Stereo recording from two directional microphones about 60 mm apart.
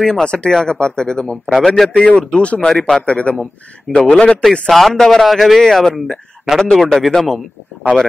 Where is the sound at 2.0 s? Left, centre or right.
Centre.